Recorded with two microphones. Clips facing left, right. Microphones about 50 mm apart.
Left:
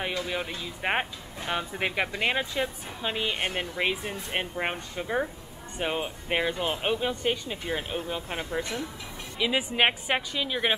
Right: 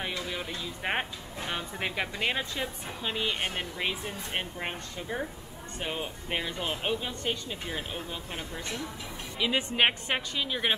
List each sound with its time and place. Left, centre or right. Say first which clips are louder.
0.3 s speech: left 3 dB; centre
9.4 s a woman's voice: left 2 dB; centre